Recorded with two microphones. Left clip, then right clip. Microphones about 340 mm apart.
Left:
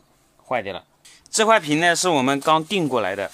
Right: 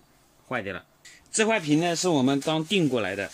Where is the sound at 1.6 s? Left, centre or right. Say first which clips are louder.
Left 4 dB; left.